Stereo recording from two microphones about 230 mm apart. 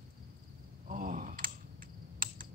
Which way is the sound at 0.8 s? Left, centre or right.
Right.